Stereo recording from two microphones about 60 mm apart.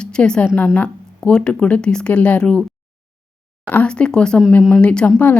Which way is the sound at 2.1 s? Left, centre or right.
Left.